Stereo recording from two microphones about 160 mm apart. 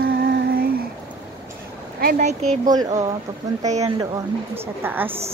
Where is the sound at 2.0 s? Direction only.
55° right (ahead or behind).